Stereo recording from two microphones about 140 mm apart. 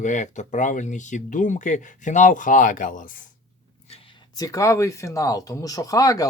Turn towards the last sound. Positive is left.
turn(degrees=25)  # may be behind; listen again after turning